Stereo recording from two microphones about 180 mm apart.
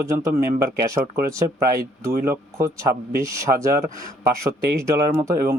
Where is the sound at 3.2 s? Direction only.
15° right (ahead or behind).